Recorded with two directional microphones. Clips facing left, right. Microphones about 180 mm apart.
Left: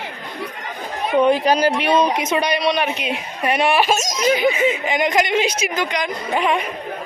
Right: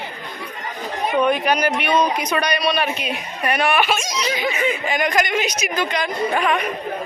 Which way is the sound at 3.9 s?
40° left (ahead or behind).